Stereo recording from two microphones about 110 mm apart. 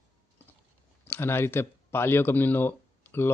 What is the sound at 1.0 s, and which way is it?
Speech, 20° left (ahead or behind).